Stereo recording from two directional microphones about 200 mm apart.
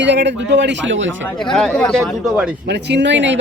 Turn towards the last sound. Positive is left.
turn(degrees=-65)  # may be behind; listen again after turning